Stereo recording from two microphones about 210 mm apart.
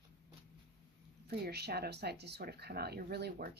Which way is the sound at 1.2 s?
50° right (ahead or behind).